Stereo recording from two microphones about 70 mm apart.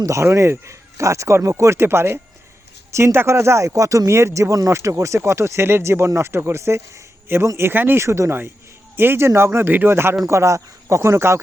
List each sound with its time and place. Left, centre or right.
0.0 s speech: right
8.0 s speech: right